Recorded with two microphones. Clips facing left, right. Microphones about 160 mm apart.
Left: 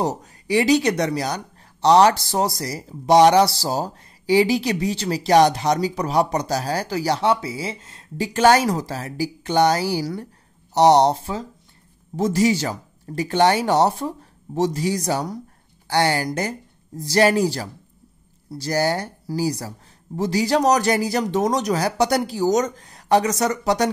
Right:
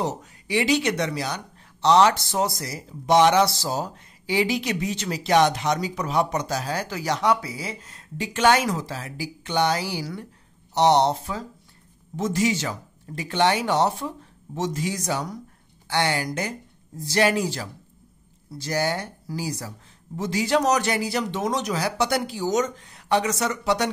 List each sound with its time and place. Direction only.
0.0 s speech: 40° left (ahead or behind)
12.2 s speech: 35° left (ahead or behind)